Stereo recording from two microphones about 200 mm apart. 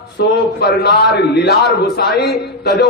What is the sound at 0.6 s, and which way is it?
A man's voice, 55° left (ahead or behind).